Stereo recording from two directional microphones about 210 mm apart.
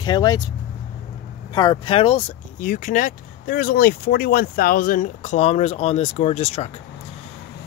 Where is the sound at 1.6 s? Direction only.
20° left (ahead or behind).